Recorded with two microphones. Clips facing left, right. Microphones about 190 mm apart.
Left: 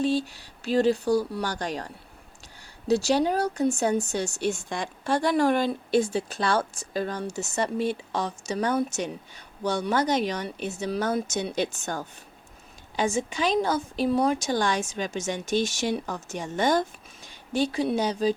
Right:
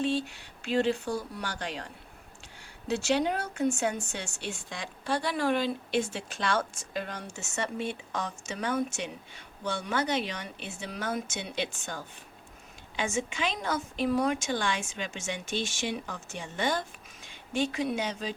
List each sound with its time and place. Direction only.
0.0 s speech: 40° left (ahead or behind)